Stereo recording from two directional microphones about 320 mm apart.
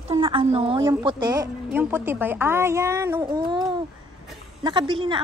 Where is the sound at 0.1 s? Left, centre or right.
Centre.